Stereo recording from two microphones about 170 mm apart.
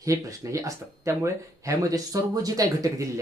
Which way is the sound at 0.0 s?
20° right (ahead or behind).